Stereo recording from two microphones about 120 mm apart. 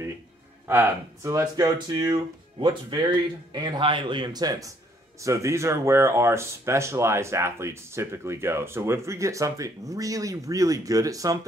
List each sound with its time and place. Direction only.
0.7 s speech: 15° right (ahead or behind)